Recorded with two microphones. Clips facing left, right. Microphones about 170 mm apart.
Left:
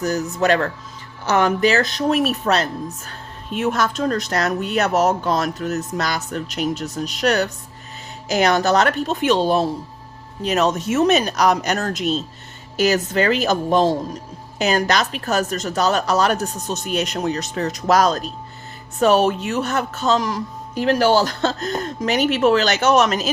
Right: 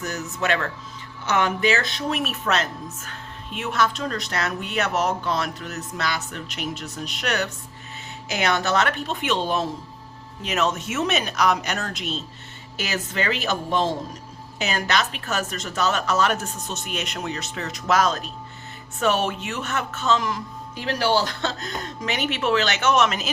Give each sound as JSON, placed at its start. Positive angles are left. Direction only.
{"t": 0.0, "sound": "speech", "side_deg": 35}